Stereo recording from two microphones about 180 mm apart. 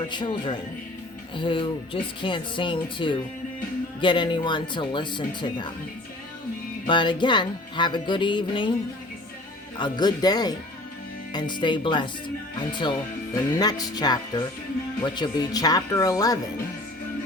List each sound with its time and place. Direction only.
0.1 s music: 25° left (ahead or behind)
6.8 s music: 25° left (ahead or behind)
9.7 s music: 25° left (ahead or behind)